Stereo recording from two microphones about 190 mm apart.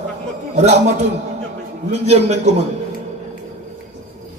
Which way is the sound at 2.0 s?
35° right (ahead or behind).